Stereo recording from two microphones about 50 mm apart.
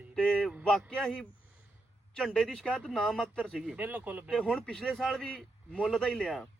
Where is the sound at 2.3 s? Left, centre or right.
Centre.